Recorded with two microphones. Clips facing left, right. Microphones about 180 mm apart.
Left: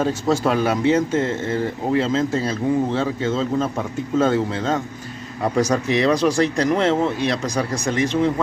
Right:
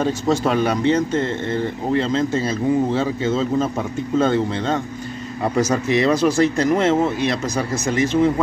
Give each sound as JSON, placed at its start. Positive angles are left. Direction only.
{"t": 0.0, "sound": "speech", "side_deg": 0}